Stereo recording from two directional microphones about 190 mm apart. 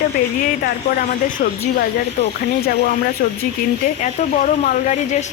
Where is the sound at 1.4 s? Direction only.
45° left (ahead or behind).